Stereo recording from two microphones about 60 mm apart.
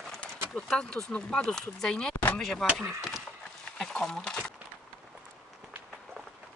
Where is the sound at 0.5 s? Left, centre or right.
Centre.